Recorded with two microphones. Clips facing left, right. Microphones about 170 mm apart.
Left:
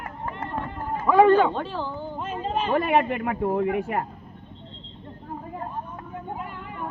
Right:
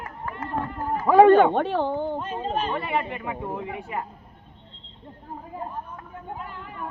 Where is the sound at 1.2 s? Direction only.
60° right (ahead or behind).